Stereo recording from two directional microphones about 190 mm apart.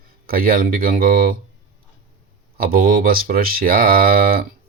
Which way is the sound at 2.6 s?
50° right (ahead or behind).